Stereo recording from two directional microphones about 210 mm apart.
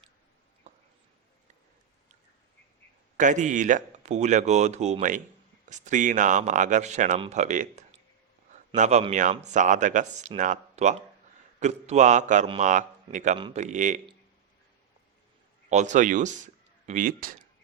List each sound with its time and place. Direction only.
3.2 s speech: 35° right (ahead or behind)
15.7 s speech: 35° right (ahead or behind)